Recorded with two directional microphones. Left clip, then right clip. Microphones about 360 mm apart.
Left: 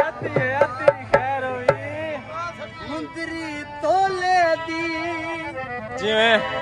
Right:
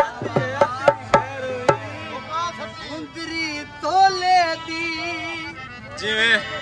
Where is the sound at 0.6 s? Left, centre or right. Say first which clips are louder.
Right 1 dB; centre.